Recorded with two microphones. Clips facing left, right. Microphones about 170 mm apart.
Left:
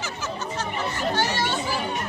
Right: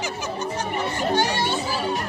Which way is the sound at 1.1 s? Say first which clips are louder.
Right 3 dB; 15° right (ahead or behind).